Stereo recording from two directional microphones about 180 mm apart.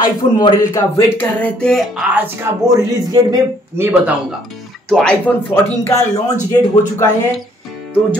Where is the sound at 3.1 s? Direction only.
20° right (ahead or behind).